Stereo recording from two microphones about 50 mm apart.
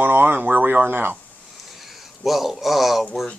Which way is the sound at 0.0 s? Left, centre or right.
Right.